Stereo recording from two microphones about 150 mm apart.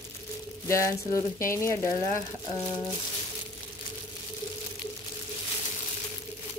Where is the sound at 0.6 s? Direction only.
20° left (ahead or behind).